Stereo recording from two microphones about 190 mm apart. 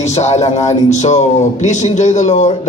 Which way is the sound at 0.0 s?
35° left (ahead or behind).